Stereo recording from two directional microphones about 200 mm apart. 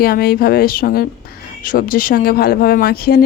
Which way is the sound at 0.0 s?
50° left (ahead or behind).